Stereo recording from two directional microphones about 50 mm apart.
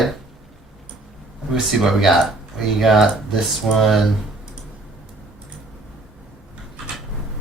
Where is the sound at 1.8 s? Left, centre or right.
Centre.